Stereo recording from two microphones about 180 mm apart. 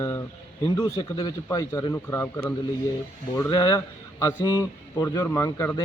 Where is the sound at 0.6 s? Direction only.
15° left (ahead or behind).